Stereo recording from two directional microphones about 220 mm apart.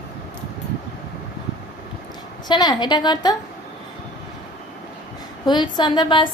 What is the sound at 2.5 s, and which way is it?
Female singing, 20° left (ahead or behind).